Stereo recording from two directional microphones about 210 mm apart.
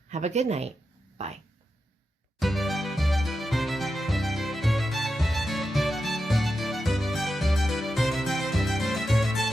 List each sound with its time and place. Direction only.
0.1 s speech: 30° right (ahead or behind)
2.4 s music: centre (ahead or behind)